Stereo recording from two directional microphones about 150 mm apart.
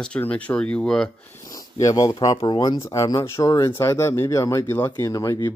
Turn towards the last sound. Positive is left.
turn(degrees=20)  # may be behind; listen again after turning